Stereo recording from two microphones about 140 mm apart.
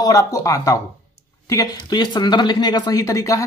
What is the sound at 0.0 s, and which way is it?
Speech, 25° left (ahead or behind).